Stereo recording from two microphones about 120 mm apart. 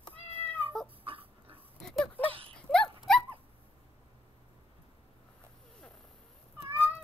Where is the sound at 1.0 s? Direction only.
50° right (ahead or behind).